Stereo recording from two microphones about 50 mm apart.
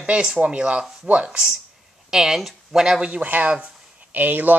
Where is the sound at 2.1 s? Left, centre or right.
Centre.